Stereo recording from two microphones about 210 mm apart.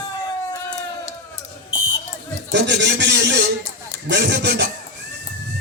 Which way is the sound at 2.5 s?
55° right (ahead or behind).